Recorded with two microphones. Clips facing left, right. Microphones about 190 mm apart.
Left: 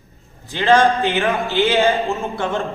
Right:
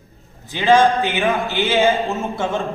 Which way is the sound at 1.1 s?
Centre (ahead or behind).